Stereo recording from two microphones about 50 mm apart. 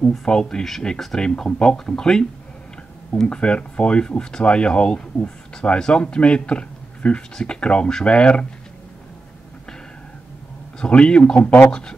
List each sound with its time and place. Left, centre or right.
0.2 s speech: centre
10.8 s speech: centre